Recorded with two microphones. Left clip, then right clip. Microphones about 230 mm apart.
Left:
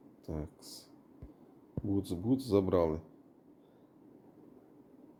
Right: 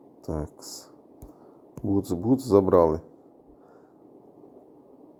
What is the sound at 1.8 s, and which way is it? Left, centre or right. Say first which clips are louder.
Speech: right 9 dB; right.